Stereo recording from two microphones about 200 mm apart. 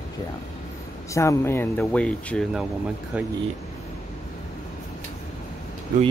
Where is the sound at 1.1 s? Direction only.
15° left (ahead or behind).